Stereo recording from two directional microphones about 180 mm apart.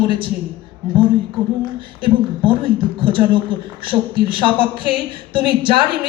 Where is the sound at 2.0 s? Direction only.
30° right (ahead or behind).